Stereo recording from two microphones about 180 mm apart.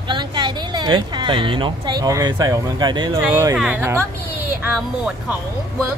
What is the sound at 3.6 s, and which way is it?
Speech, 10° right (ahead or behind).